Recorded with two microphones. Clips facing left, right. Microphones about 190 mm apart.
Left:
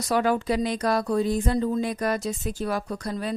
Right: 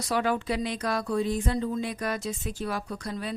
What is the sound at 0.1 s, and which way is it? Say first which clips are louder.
Speech: left 4 dB; 45° left (ahead or behind).